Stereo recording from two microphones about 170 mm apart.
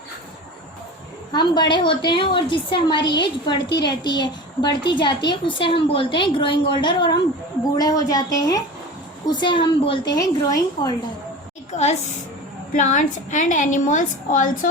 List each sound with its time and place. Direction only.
1.3 s a woman's voice: 25° left (ahead or behind)
11.7 s a woman's voice: 40° left (ahead or behind)